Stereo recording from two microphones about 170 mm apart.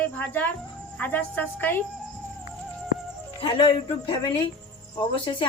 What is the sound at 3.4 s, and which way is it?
Speech, 30° left (ahead or behind).